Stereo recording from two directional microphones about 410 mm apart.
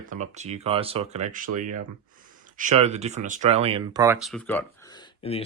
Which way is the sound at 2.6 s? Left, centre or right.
Centre.